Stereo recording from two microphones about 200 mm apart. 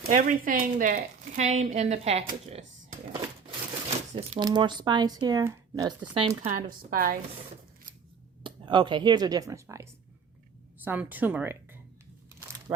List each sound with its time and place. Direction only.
0.0 s speech: 40° right (ahead or behind)
3.4 s a sound: 30° right (ahead or behind)
4.3 s speech: 20° right (ahead or behind)
6.4 s speech: 40° right (ahead or behind)
8.4 s speech: 25° right (ahead or behind); by 11.8 s 10° right (ahead or behind)
12.4 s crumpling: 20° right (ahead or behind)